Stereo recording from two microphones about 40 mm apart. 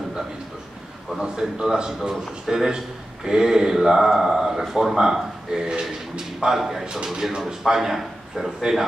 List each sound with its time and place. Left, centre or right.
1.2 s a man's voice: centre